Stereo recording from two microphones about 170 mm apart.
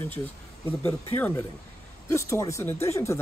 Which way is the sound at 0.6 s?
10° left (ahead or behind).